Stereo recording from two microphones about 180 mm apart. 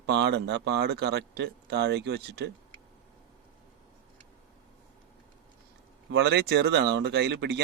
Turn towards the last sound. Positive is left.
turn(degrees=-70)  # may be behind; listen again after turning